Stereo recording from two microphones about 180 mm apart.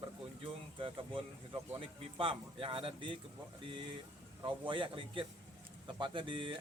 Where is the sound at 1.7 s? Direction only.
30° right (ahead or behind).